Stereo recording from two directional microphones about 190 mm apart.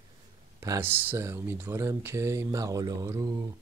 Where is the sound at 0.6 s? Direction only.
15° right (ahead or behind).